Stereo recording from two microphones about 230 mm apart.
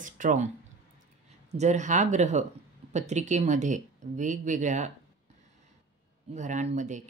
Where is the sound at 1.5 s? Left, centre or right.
Right.